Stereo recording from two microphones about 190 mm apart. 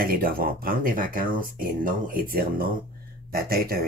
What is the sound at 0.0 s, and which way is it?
Speech, 50° right (ahead or behind).